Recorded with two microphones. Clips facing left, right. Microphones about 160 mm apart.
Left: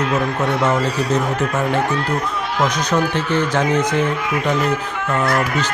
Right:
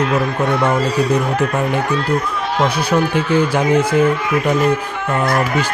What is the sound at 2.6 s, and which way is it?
A man's voice, 10° right (ahead or behind).